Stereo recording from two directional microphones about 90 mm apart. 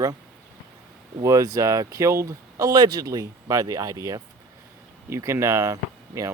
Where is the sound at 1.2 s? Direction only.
40° right (ahead or behind).